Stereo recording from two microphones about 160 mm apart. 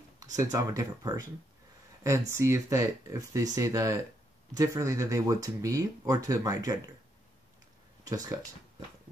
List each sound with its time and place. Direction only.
0.4 s speech: 20° right (ahead or behind)
8.0 s speech: 25° right (ahead or behind)